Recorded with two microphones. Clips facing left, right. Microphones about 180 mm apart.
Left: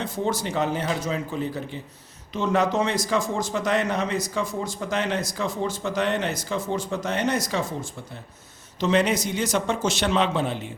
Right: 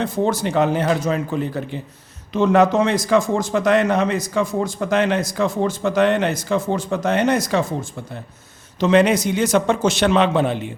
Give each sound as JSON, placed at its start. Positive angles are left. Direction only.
{"t": 0.0, "sound": "a man's voice", "side_deg": -50}
{"t": 2.9, "sound": "speech", "side_deg": -50}
{"t": 3.3, "sound": "a man's voice", "side_deg": -65}
{"t": 6.9, "sound": "speech", "side_deg": -75}
{"t": 8.8, "sound": "a man's voice", "side_deg": -65}